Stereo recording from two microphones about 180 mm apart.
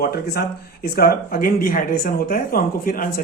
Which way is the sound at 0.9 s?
55° left (ahead or behind).